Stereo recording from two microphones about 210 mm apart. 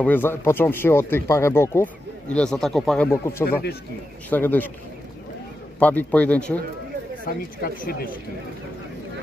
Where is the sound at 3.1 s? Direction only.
10° left (ahead or behind).